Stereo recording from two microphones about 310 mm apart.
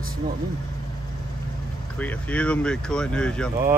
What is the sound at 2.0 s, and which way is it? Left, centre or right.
Speech, centre.